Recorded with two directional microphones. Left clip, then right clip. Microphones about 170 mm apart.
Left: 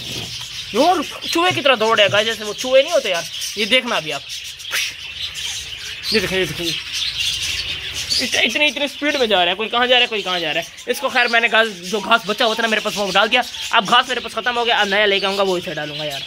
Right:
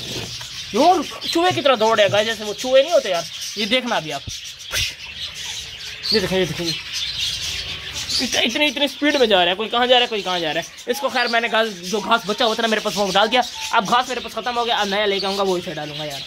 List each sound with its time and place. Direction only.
0.7 s speech: centre (ahead or behind)
6.1 s speech: 5° right (ahead or behind)
8.3 s speech: 20° right (ahead or behind)
11.1 s speech: centre (ahead or behind)
13.7 s speech: centre (ahead or behind)